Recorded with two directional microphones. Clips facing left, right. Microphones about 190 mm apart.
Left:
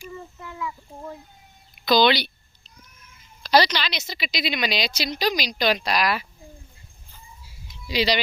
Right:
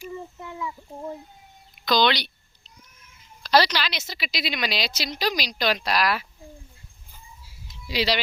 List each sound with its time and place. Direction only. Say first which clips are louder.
0.1 s a sound: right 2 dB; 15° right (ahead or behind)
1.8 s a woman's voice: left 3 dB; 5° left (ahead or behind)
3.4 s a woman's voice: left 1 dB; centre (ahead or behind)
7.9 s a woman's voice: left 2 dB; 5° right (ahead or behind)